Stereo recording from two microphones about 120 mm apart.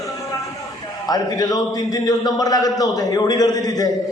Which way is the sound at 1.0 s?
35° left (ahead or behind).